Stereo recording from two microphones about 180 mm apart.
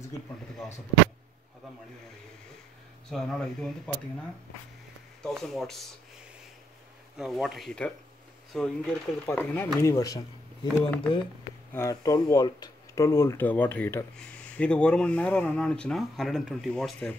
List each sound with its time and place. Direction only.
3.1 s speech: centre (ahead or behind)
5.2 s speech: centre (ahead or behind)
7.2 s speech: centre (ahead or behind); by 10.7 s 20° left (ahead or behind)
11.7 s speech: 15° left (ahead or behind); by 17.1 s centre (ahead or behind)